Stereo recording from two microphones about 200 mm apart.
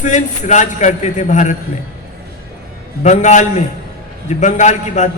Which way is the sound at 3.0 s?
35° left (ahead or behind).